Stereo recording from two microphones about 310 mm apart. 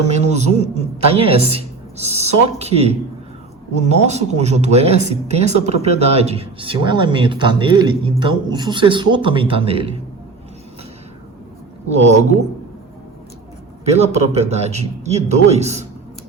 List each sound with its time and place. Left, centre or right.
0.3 s speech: right
11.9 s speech: right
13.8 s speech: right